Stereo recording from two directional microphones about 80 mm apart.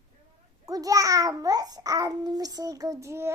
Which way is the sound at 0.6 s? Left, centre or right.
Right.